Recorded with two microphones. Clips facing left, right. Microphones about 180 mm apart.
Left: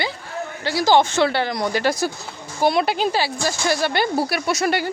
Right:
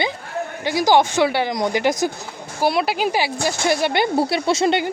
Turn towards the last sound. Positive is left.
turn(degrees=-25)  # may be behind; listen again after turning